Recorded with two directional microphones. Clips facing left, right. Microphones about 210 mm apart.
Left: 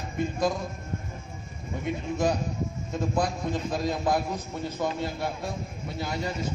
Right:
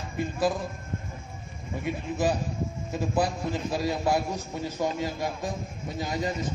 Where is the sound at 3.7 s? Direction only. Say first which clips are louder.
Right 1 dB; 10° right (ahead or behind).